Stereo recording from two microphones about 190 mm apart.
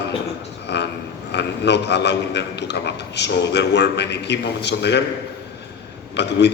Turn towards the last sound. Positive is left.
turn(degrees=65)  # may be behind; listen again after turning